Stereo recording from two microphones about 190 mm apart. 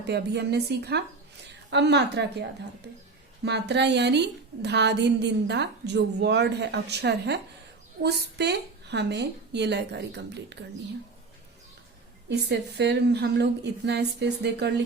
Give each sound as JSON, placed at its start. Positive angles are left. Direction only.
{"t": 0.0, "sound": "a woman's voice", "side_deg": -60}
{"t": 12.3, "sound": "a woman's voice", "side_deg": -60}